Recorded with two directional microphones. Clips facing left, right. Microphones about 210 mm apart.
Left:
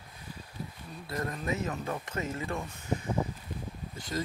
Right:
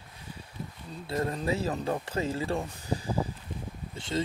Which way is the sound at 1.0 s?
30° right (ahead or behind).